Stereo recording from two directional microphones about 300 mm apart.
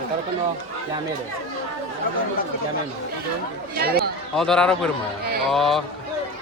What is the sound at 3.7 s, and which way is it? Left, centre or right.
Speech, right.